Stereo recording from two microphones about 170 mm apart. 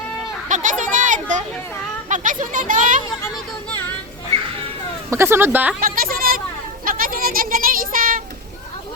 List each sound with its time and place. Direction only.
0.4 s a sound: 50° right (ahead or behind)
2.0 s speech: 50° right (ahead or behind)
5.1 s speech: 15° right (ahead or behind)
5.8 s speech: 55° right (ahead or behind)